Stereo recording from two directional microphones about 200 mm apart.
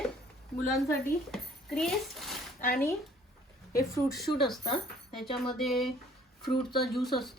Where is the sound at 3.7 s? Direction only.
15° left (ahead or behind).